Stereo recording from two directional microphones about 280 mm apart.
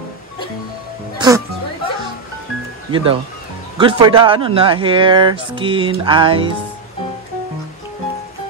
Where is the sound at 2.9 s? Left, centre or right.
Centre.